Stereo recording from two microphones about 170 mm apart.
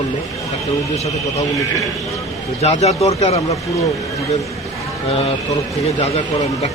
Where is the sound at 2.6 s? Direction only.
40° left (ahead or behind).